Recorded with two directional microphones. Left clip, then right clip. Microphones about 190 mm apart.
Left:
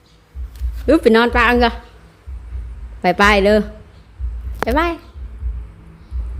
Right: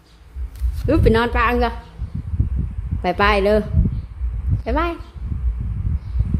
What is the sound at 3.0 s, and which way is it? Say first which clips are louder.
Speech: left 4 dB; 20° left (ahead or behind).